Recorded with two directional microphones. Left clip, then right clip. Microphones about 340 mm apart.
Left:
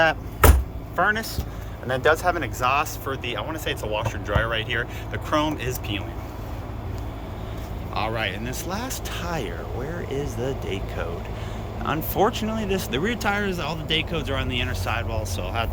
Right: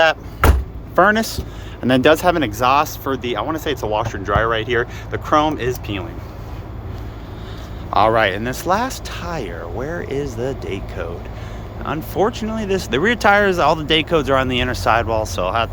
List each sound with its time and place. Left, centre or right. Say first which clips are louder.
1.1 s speech: right 8 dB; right
7.9 s speech: right 12 dB; centre